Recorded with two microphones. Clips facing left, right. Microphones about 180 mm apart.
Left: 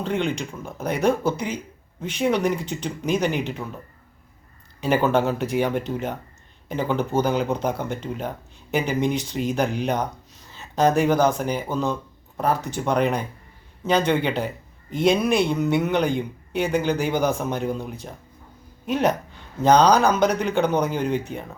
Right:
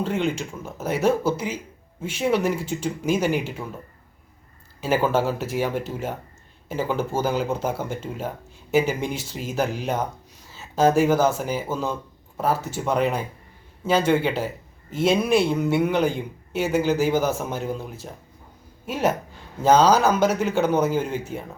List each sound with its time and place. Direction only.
0.0 s speech: 5° right (ahead or behind)
4.8 s speech: 5° right (ahead or behind)